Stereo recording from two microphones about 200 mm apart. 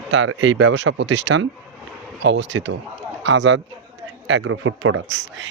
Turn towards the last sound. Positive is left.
turn(degrees=-80)